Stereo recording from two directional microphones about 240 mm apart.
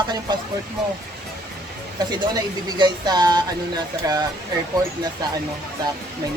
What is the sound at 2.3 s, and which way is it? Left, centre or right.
Speech, centre.